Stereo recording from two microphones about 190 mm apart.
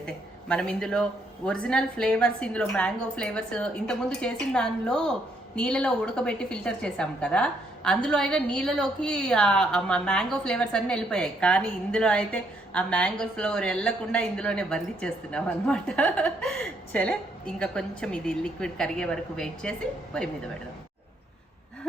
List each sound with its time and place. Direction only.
0.0 s a woman's voice: 5° left (ahead or behind)